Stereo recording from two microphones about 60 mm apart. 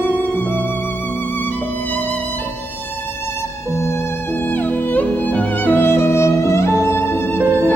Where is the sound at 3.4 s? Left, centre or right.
Left.